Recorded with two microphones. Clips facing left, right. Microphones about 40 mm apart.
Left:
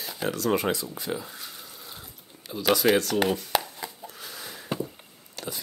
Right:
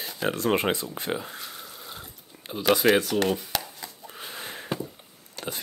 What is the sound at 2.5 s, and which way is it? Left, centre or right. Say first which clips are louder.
Speech: right 1 dB; centre.